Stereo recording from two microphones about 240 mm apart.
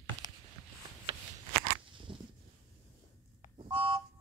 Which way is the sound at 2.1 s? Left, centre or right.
Right.